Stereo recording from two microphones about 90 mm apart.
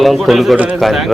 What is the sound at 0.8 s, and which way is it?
Speech, centre (ahead or behind).